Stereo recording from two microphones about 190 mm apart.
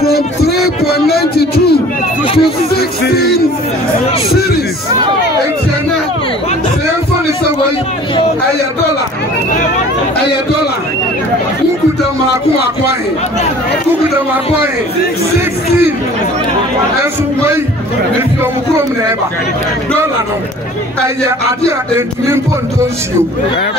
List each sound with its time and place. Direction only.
0.5 s music: 55° left (ahead or behind)